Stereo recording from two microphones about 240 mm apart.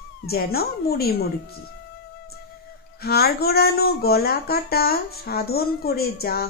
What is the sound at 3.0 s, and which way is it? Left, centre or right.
Speech, left.